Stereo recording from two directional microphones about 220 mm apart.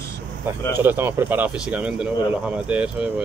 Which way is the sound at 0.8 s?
10° right (ahead or behind).